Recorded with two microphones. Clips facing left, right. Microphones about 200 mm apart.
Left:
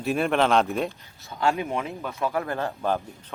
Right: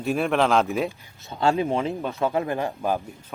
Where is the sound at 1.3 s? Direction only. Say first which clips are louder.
Right 3 dB; 30° right (ahead or behind); by 3.0 s 10° right (ahead or behind).